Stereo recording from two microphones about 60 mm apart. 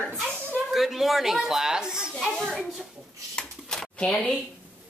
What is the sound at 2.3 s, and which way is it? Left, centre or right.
Speech, centre.